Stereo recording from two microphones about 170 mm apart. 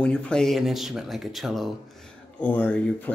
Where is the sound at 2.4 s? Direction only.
10° left (ahead or behind).